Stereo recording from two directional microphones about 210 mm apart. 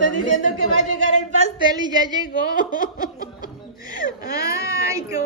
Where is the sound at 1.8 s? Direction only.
20° right (ahead or behind).